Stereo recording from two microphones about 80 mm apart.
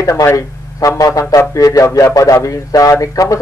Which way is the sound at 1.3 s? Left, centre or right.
Left.